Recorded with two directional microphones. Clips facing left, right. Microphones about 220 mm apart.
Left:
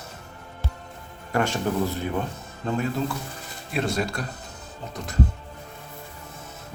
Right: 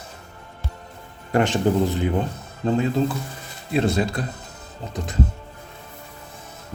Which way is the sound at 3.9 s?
20° right (ahead or behind).